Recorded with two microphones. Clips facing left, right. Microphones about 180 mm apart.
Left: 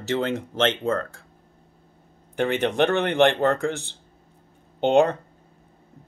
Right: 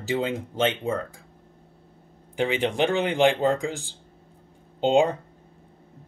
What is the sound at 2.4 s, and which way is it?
Speech, 60° left (ahead or behind).